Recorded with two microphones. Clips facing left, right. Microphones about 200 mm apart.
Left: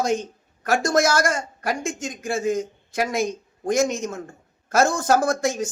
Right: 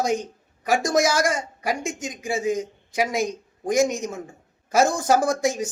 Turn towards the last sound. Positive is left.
turn(degrees=-15)  # may be behind; listen again after turning